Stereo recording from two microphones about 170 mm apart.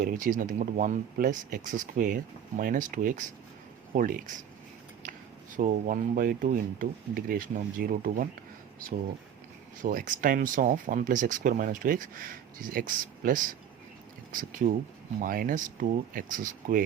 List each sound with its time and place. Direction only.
0.0 s speech: 50° right (ahead or behind)
5.5 s speech: 50° right (ahead or behind)
9.8 s speech: 50° right (ahead or behind)
14.6 s speech: 50° right (ahead or behind)